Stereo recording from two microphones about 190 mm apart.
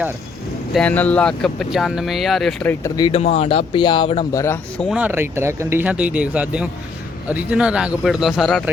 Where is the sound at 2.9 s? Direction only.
25° left (ahead or behind).